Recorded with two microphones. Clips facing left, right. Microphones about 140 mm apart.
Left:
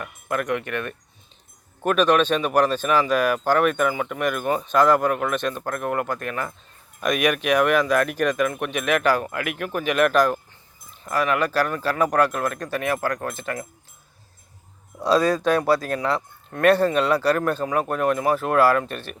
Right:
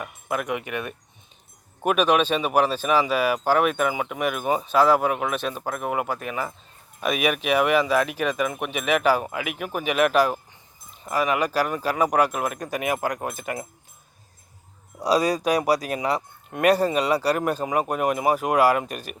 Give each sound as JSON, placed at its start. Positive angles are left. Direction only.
{"t": 0.0, "sound": "speech", "side_deg": -5}
{"t": 14.9, "sound": "speech", "side_deg": -10}